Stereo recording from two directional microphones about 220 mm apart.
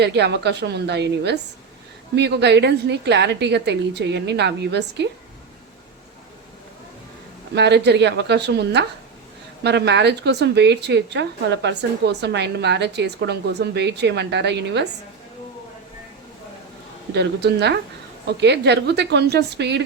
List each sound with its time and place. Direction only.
0.0 s speech: 50° right (ahead or behind)
7.5 s speech: 50° right (ahead or behind)
17.2 s speech: 50° right (ahead or behind)